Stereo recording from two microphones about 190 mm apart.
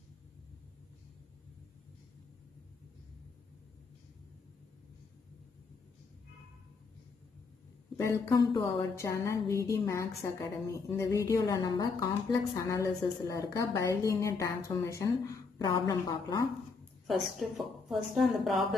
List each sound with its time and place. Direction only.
8.7 s a woman's voice: 15° left (ahead or behind)
17.1 s a woman's voice: centre (ahead or behind)